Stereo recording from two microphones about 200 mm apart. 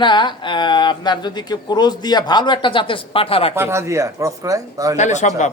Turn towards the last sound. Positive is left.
turn(degrees=35)  # may be behind; listen again after turning